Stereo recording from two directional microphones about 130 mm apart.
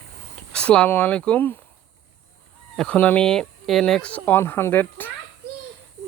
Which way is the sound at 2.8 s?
10° left (ahead or behind).